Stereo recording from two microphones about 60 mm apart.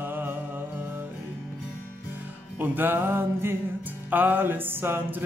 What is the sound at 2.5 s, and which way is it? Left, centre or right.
Music, right.